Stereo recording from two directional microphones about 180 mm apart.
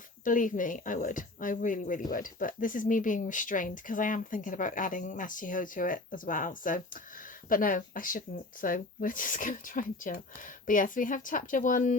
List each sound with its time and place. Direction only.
0.3 s a woman's voice: 45° left (ahead or behind)